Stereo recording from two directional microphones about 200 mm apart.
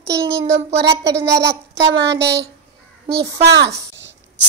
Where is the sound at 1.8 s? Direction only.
60° right (ahead or behind).